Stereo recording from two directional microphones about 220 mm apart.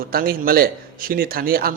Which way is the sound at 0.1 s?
40° right (ahead or behind).